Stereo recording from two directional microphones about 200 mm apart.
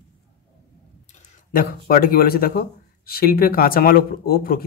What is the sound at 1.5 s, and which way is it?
Speech, 45° left (ahead or behind).